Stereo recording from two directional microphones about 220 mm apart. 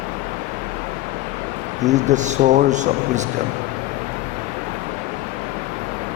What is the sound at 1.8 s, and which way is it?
Speech, 35° right (ahead or behind).